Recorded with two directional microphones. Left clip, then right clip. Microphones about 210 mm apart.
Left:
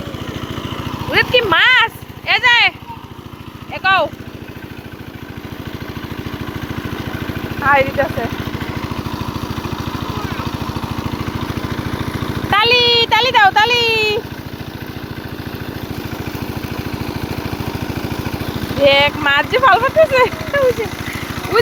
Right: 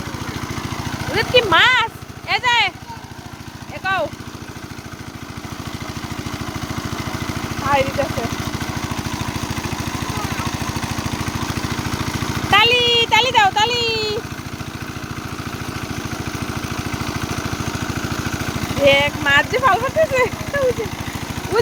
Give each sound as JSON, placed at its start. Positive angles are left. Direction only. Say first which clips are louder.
{"t": 1.1, "sound": "speech", "louder": "left 2 dB", "side_deg": -10}
{"t": 3.8, "sound": "speech", "louder": "left 7 dB", "side_deg": -10}
{"t": 7.7, "sound": "speech", "louder": "left 5 dB", "side_deg": -10}
{"t": 9.0, "sound": "vehicle", "louder": "left 1 dB", "side_deg": 0}
{"t": 17.7, "sound": "vehicle", "louder": "left 1 dB", "side_deg": -10}
{"t": 18.9, "sound": "speech", "louder": "left 2 dB", "side_deg": -5}
{"t": 20.7, "sound": "speech", "louder": "left 4 dB", "side_deg": -50}
{"t": 21.5, "sound": "speech", "louder": "left 4 dB", "side_deg": -15}